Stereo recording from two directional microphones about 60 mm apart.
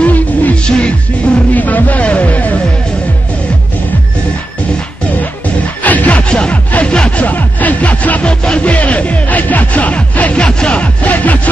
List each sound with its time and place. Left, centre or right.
0.0 s music: left
0.7 s music: centre
1.5 s music: left
5.9 s music: left